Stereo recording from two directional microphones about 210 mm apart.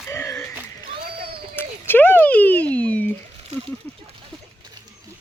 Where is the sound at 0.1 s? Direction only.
15° left (ahead or behind).